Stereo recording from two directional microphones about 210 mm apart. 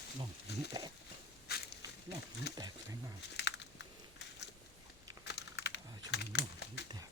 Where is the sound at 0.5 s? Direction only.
50° left (ahead or behind).